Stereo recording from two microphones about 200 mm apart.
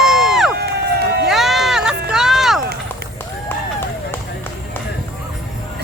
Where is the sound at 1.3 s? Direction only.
Centre (ahead or behind).